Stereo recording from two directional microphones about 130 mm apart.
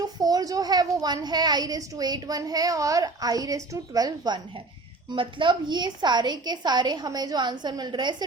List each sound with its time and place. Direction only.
0.2 s a child's voice: 30° right (ahead or behind)
5.1 s a woman's voice: 40° right (ahead or behind)